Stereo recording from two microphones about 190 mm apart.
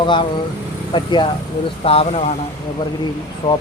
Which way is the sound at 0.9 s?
25° left (ahead or behind).